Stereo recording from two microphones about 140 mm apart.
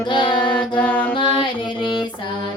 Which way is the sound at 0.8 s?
10° left (ahead or behind).